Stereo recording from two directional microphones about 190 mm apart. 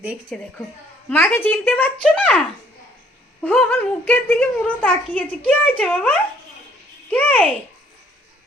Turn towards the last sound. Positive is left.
turn(degrees=5)  # may be behind; listen again after turning